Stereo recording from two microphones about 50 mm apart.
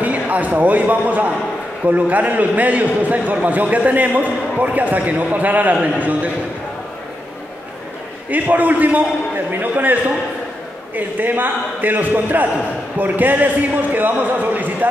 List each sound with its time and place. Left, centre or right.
0.0 s a man's voice: right
8.3 s a man's voice: right
11.0 s a man's voice: right